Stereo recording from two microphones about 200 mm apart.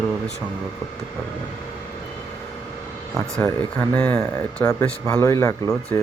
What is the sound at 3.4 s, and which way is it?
Speech, 10° left (ahead or behind).